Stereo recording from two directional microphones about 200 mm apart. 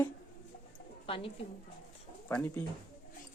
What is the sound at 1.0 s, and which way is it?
Speech, 25° left (ahead or behind).